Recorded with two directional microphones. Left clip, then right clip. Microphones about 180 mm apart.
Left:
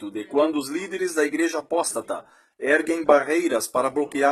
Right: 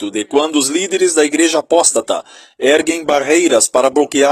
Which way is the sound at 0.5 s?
35° right (ahead or behind).